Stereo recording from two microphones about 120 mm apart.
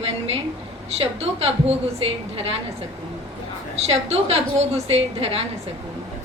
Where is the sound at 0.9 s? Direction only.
55° right (ahead or behind).